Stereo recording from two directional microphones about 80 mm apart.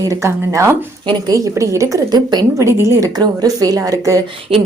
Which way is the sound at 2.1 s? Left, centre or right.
Right.